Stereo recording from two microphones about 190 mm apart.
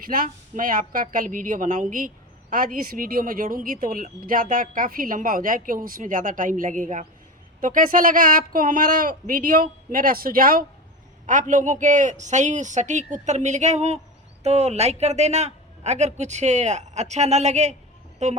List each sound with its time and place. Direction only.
0.0 s a woman's voice: 50° right (ahead or behind)